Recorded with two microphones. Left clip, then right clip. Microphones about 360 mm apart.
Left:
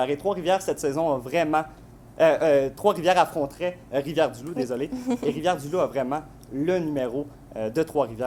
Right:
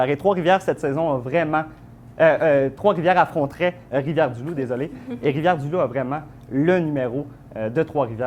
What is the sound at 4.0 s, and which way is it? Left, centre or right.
Speech, right.